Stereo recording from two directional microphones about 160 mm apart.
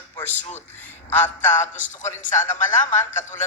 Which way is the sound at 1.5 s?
50° left (ahead or behind).